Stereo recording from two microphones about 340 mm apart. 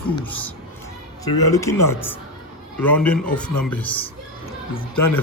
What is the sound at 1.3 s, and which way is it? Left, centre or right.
Speech, left.